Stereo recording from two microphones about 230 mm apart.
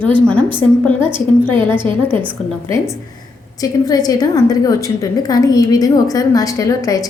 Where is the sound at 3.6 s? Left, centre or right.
Centre.